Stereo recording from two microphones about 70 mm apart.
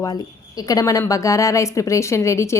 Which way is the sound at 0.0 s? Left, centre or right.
Left.